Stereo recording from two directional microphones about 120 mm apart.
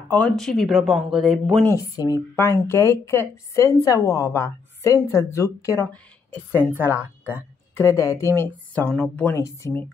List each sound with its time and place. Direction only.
0.4 s speech: centre (ahead or behind)
1.7 s a woman's voice: 30° left (ahead or behind)
5.9 s a woman's voice: 15° left (ahead or behind)
7.0 s a woman's voice: 15° right (ahead or behind)
7.7 s a woman's voice: 25° left (ahead or behind)
8.4 s a woman's voice: 15° left (ahead or behind)